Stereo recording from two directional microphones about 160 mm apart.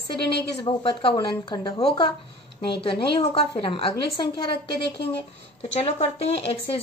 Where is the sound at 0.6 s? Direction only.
35° left (ahead or behind).